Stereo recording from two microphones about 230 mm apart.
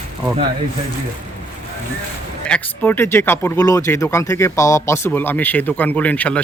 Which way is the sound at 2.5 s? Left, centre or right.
Centre.